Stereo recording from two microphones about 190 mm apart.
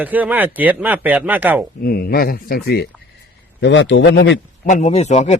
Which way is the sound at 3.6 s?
75° left (ahead or behind).